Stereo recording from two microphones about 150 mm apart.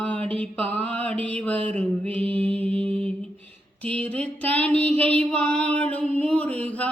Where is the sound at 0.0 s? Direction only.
10° left (ahead or behind).